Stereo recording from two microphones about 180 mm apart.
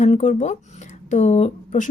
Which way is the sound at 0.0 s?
40° left (ahead or behind).